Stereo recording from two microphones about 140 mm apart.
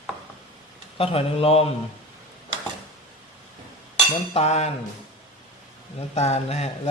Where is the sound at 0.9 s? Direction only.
45° left (ahead or behind).